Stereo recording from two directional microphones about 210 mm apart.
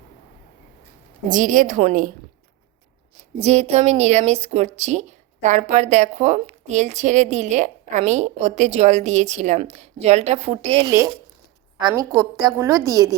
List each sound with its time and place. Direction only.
1.3 s a woman's voice: 40° right (ahead or behind)
3.4 s a woman's voice: 30° right (ahead or behind)
10.8 s a woman's voice: 15° right (ahead or behind)